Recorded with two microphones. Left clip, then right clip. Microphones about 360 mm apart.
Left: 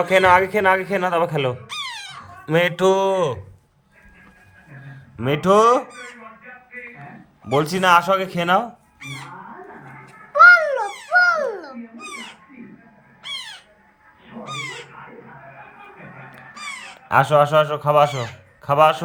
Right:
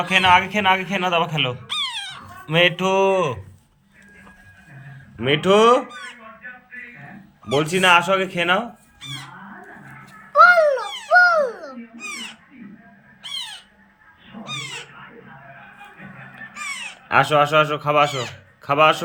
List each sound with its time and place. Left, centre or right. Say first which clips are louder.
0.0 s speech: left 1 dB; centre
1.6 s a sound: right 5 dB; centre
2.5 s speech: left 1 dB; centre
5.2 s speech: even; centre
7.4 s speech: right 1 dB; centre
10.3 s a sound: left 2 dB; centre
11.3 s babbling: right 1 dB; centre
12.0 s owl: right 3 dB; centre
17.1 s speech: left 1 dB; left